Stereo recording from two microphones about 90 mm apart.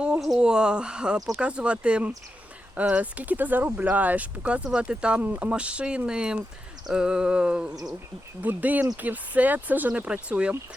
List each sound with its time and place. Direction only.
0.3 s speech: 10° right (ahead or behind)